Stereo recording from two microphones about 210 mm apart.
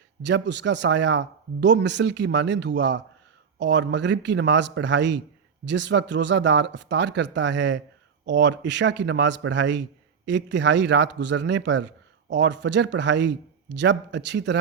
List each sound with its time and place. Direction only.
0.2 s speech: 55° right (ahead or behind)